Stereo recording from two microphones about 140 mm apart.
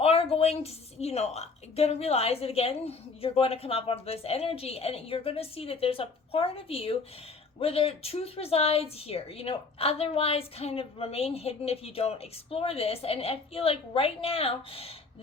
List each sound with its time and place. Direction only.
0.0 s a woman's voice: 45° left (ahead or behind)